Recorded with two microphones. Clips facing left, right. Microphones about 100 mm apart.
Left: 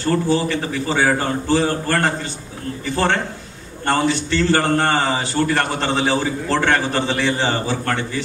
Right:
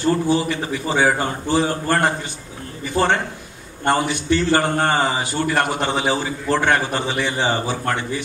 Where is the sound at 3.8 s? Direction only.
15° right (ahead or behind).